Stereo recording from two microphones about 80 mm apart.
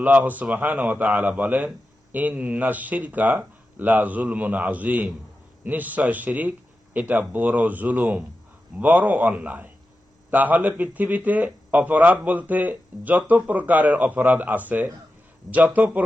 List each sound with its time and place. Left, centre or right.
0.0 s a man's voice: right